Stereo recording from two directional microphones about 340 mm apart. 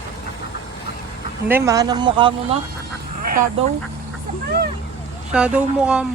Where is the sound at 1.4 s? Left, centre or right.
Centre.